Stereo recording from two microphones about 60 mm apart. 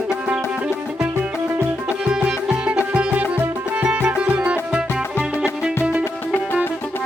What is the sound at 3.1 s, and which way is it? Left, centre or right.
Music, right.